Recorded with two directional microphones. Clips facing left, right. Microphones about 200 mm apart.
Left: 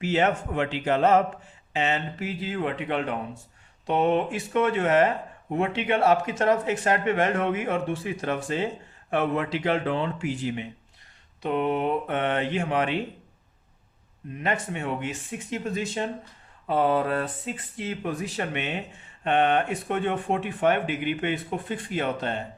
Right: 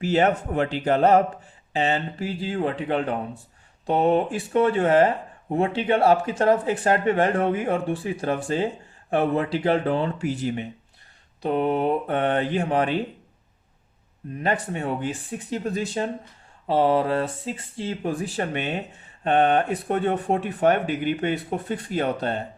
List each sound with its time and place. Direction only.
0.0 s speech: 35° right (ahead or behind)
14.4 s speech: 35° right (ahead or behind)